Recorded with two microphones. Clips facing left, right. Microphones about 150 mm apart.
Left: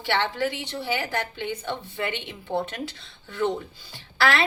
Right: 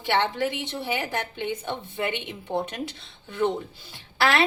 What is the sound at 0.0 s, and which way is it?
A woman's voice, 20° right (ahead or behind).